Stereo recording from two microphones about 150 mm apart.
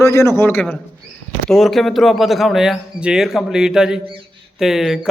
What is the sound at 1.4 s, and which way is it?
A man's voice, centre (ahead or behind).